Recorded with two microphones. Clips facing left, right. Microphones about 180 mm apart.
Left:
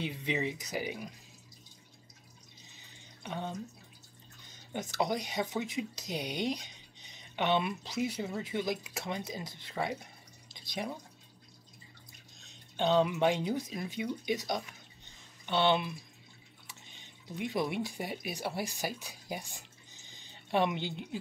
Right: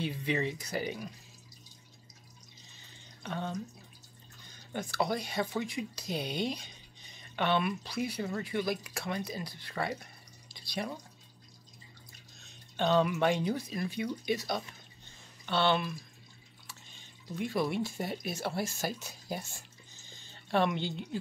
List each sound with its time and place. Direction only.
0.0 s speech: 20° left (ahead or behind)
3.2 s speech: 15° left (ahead or behind)
10.5 s drip: 15° left (ahead or behind)
12.7 s speech: 15° left (ahead or behind)
16.6 s drip: 20° left (ahead or behind)
17.9 s speech: 10° left (ahead or behind)